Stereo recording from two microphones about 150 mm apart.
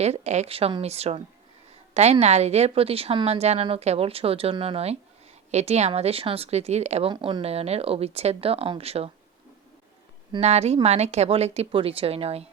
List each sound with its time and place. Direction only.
0.0 s a woman's voice: 50° right (ahead or behind)
7.1 s speech: 35° right (ahead or behind)
10.4 s a woman's voice: 45° right (ahead or behind)